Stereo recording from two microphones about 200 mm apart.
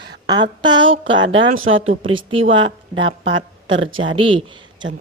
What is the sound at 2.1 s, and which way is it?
Speech, 30° right (ahead or behind).